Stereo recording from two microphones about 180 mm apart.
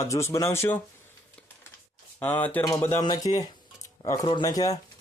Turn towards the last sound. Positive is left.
turn(degrees=20)  # may be behind; listen again after turning